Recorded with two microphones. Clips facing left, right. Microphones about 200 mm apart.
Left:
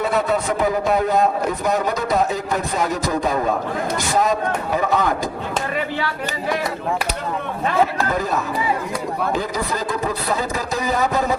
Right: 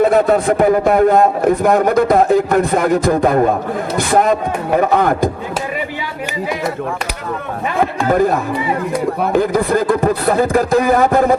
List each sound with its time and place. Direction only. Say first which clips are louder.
0.0 s a man's voice: right 8 dB; 50° right (ahead or behind)
8.1 s a man's voice: right 8 dB; 55° right (ahead or behind)